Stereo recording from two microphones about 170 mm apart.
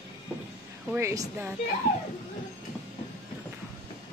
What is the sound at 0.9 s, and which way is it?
Speech, 15° right (ahead or behind).